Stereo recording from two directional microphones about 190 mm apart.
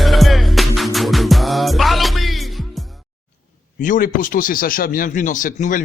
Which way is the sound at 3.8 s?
45° left (ahead or behind).